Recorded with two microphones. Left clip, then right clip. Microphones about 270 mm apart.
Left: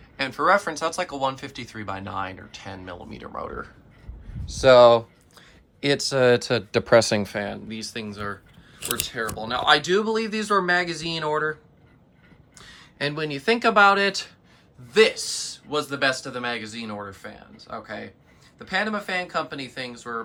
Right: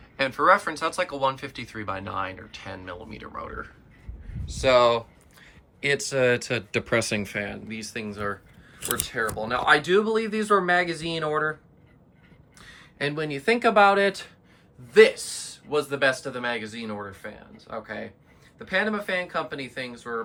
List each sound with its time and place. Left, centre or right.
0.2 s speech: centre
4.4 s speech: left
6.4 s speech: left
6.7 s speech: centre
12.5 s speech: centre